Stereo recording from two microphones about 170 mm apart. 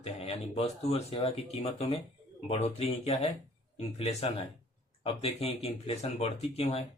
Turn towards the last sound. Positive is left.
turn(degrees=35)  # may be behind; listen again after turning